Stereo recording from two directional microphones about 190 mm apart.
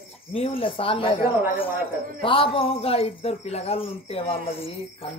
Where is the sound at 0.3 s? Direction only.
30° left (ahead or behind).